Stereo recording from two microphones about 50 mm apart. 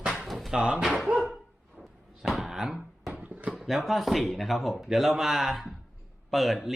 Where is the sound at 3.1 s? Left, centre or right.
Right.